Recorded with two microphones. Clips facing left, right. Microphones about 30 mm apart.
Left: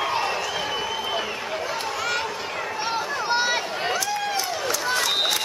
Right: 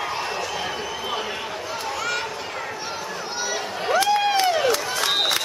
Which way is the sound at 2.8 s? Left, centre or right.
Left.